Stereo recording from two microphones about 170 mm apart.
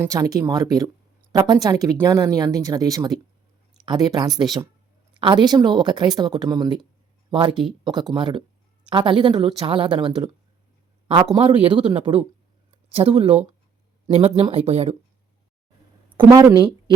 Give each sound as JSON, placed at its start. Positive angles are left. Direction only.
{"t": 0.0, "sound": "speech", "side_deg": -20}
{"t": 16.1, "sound": "speech", "side_deg": -20}